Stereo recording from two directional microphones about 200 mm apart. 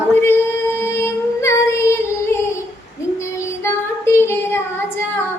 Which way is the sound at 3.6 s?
10° left (ahead or behind).